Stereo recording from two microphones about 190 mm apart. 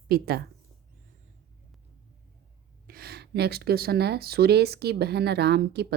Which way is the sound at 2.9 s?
55° right (ahead or behind).